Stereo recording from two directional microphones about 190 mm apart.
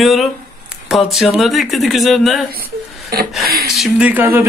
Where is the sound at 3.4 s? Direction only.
55° right (ahead or behind).